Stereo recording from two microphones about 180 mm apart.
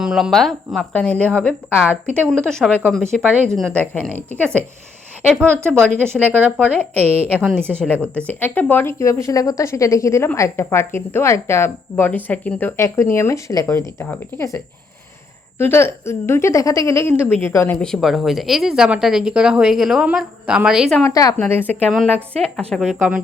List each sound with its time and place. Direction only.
0.0 s a woman's voice: centre (ahead or behind)
5.5 s speech: 15° right (ahead or behind)
5.8 s a woman's voice: 5° left (ahead or behind)
6.2 s speech: 10° right (ahead or behind)
7.3 s a woman's voice: 5° left (ahead or behind)
7.9 s speech: 10° right (ahead or behind)
8.3 s a woman's voice: 10° left (ahead or behind)
21.0 s a woman's voice: 20° left (ahead or behind); by 23.2 s 5° right (ahead or behind)